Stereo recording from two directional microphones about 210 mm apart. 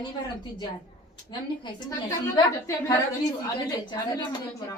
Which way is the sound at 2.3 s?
20° left (ahead or behind).